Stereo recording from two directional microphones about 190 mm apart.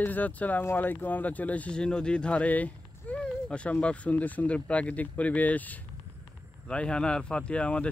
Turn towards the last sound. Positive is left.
turn(degrees=5)  # may be behind; listen again after turning